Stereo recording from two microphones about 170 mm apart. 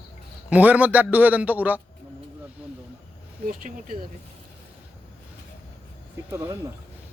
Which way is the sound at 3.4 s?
55° right (ahead or behind).